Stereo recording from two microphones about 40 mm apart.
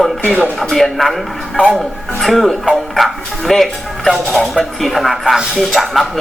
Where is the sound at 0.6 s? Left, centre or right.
Centre.